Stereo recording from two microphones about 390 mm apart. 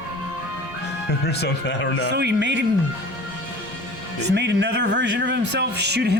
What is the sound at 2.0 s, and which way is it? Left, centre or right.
Speech, right.